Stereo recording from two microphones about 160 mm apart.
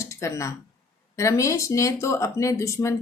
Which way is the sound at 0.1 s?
20° left (ahead or behind).